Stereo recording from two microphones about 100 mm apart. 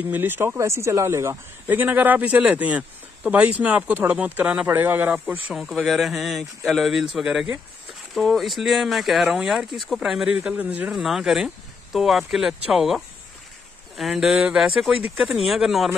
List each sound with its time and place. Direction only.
0.1 s a man's voice: 20° right (ahead or behind)
5.5 s speech: centre (ahead or behind)